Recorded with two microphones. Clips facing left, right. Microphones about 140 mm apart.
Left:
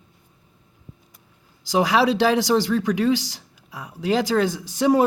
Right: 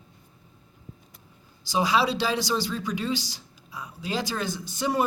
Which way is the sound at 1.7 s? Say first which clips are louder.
Left 5 dB; 90° left.